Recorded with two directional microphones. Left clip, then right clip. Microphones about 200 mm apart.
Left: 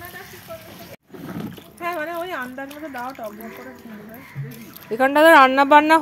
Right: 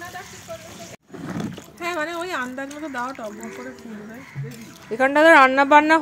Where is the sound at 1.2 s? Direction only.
50° right (ahead or behind).